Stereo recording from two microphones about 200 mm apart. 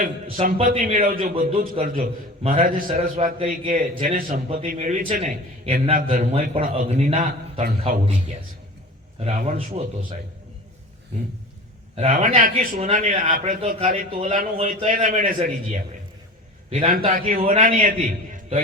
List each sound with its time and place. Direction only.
0.0 s a man's voice: 45° right (ahead or behind)
3.3 s speech: 30° right (ahead or behind)
3.8 s a man's voice: 45° right (ahead or behind)
9.2 s speech: 35° right (ahead or behind)
12.1 s a man's voice: 40° right (ahead or behind)
14.9 s a man's voice: 40° right (ahead or behind)
17.0 s a man's voice: 40° right (ahead or behind)
17.4 s speech: 30° right (ahead or behind)
17.7 s a man's voice: 45° right (ahead or behind)